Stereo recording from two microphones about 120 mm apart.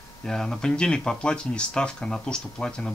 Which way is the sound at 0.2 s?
5° left (ahead or behind).